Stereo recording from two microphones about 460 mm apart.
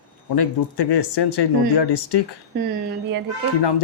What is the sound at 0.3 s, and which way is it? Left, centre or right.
Speech, left.